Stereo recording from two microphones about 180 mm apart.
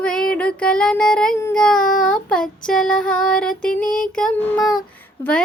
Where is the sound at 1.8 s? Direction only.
50° left (ahead or behind).